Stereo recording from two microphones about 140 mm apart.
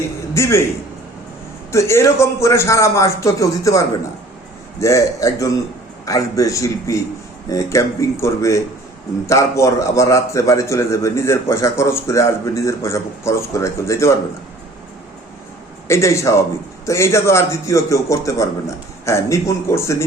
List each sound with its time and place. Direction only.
0.3 s a man's voice: 20° left (ahead or behind)
1.7 s a man's voice: 20° left (ahead or behind)
15.9 s a man's voice: 20° left (ahead or behind)